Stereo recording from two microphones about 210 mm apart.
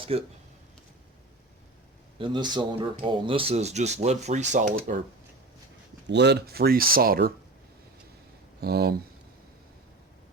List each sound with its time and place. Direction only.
0.1 s speech: 30° right (ahead or behind)
2.1 s speech: 25° right (ahead or behind); by 5.0 s 40° right (ahead or behind)
6.1 s speech: 55° right (ahead or behind)
8.6 s speech: 50° right (ahead or behind)